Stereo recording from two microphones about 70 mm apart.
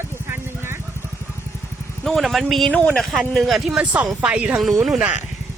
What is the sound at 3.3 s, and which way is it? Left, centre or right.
Speech, centre.